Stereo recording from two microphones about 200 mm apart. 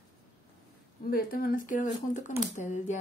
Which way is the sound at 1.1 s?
45° left (ahead or behind).